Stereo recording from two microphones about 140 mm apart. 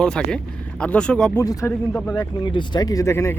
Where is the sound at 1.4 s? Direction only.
20° left (ahead or behind).